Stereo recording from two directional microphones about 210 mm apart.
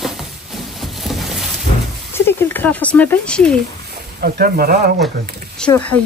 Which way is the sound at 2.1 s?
10° left (ahead or behind).